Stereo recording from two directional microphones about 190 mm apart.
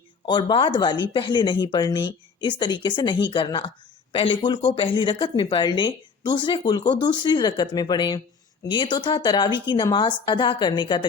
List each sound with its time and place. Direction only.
0.3 s speech: 25° left (ahead or behind)